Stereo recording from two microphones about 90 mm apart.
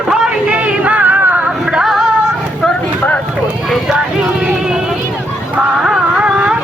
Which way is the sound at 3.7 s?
5° right (ahead or behind).